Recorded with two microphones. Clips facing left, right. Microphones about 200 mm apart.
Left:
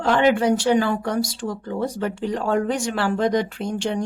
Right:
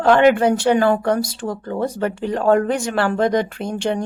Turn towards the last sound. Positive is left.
turn(degrees=-55)  # may be behind; listen again after turning